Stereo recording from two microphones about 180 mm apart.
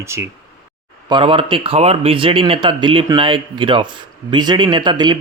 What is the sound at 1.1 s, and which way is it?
Speech, 25° right (ahead or behind).